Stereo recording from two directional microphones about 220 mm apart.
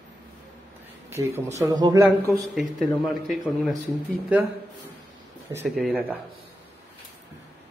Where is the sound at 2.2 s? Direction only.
Centre (ahead or behind).